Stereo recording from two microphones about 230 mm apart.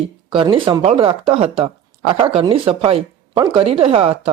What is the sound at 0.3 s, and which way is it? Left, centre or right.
Speech, right.